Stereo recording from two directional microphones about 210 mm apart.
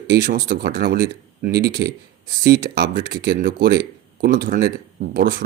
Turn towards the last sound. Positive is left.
turn(degrees=-45)  # may be behind; listen again after turning